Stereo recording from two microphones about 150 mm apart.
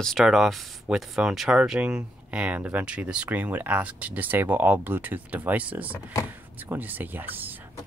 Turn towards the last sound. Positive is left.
turn(degrees=-10)  # may be behind; listen again after turning